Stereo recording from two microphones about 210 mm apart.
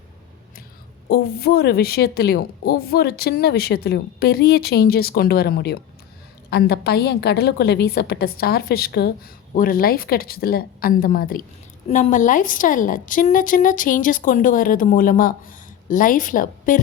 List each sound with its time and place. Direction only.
1.0 s a woman's voice: 50° left (ahead or behind)